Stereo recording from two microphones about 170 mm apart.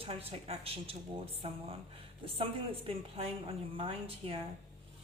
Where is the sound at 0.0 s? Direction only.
35° right (ahead or behind).